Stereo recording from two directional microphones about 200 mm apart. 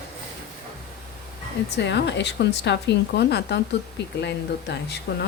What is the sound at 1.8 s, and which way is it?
Speech, 60° left (ahead or behind).